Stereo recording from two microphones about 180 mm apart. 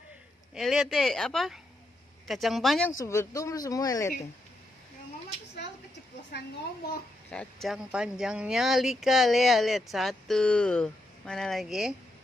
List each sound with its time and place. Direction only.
0.6 s speech: centre (ahead or behind)
3.0 s speech: 15° left (ahead or behind)
7.2 s speech: 5° left (ahead or behind)